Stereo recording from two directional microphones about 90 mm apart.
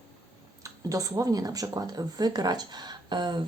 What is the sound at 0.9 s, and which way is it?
Speech, 40° right (ahead or behind).